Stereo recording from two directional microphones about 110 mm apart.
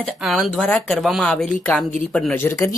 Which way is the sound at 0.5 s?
10° left (ahead or behind).